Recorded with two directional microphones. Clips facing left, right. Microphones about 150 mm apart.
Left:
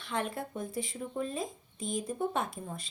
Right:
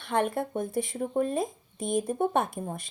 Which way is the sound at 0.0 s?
55° right (ahead or behind).